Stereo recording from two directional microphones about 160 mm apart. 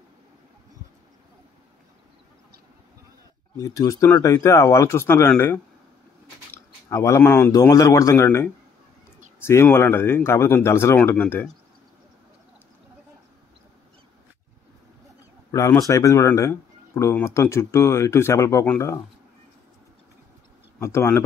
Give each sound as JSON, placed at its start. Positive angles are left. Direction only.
{"t": 3.5, "sound": "speech", "side_deg": 20}
{"t": 9.5, "sound": "speech", "side_deg": 15}
{"t": 15.5, "sound": "speech", "side_deg": 20}
{"t": 20.8, "sound": "speech", "side_deg": 15}